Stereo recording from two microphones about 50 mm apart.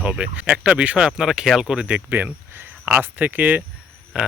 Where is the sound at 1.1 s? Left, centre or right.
Centre.